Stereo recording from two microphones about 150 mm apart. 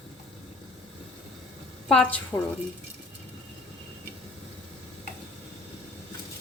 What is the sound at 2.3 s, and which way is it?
Speech, 25° left (ahead or behind).